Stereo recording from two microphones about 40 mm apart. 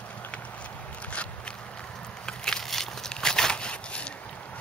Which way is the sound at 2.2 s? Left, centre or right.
Centre.